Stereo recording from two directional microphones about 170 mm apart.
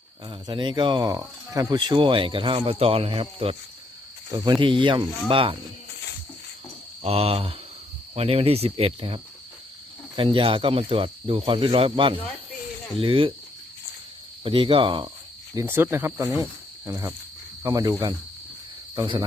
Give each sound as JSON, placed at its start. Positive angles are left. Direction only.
{"t": 0.3, "sound": "speech", "side_deg": -30}
{"t": 7.0, "sound": "speech", "side_deg": -35}
{"t": 14.4, "sound": "speech", "side_deg": -30}
{"t": 15.5, "sound": "cricket", "side_deg": -15}
{"t": 17.6, "sound": "speech", "side_deg": -20}